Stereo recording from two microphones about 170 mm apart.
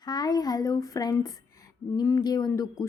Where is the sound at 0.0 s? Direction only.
25° left (ahead or behind).